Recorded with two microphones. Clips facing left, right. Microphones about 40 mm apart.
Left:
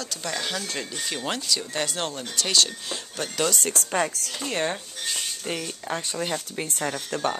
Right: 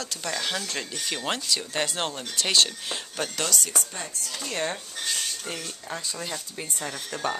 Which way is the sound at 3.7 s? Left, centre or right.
Left.